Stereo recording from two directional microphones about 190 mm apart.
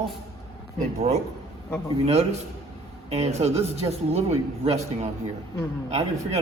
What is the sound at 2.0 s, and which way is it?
A man's voice, 35° right (ahead or behind).